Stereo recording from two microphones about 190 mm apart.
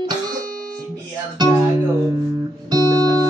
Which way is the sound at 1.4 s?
20° right (ahead or behind).